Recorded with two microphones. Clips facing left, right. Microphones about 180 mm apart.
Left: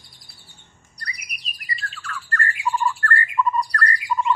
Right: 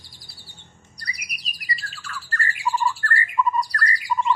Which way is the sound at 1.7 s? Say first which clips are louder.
Left 6 dB; 5° right (ahead or behind).